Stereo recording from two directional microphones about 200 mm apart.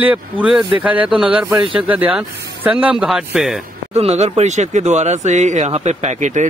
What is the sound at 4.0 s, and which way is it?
Speech, 30° right (ahead or behind).